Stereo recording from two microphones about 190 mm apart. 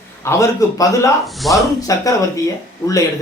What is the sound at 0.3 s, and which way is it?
Speech, 15° left (ahead or behind).